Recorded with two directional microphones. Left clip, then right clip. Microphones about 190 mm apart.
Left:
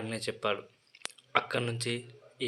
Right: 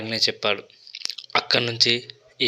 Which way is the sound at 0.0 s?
15° right (ahead or behind).